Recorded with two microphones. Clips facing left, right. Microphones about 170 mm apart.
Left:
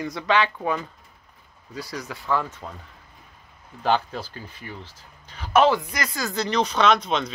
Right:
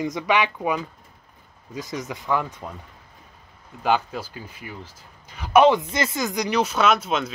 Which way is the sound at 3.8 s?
10° right (ahead or behind).